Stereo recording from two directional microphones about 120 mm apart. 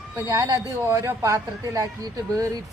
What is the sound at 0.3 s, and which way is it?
Speech, 30° right (ahead or behind).